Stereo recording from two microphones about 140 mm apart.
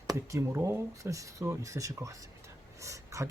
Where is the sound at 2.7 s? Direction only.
20° right (ahead or behind).